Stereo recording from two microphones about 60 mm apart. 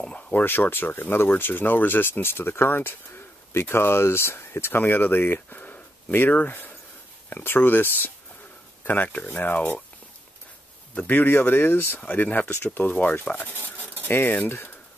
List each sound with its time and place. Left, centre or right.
0.0 s speech: left
11.0 s speech: left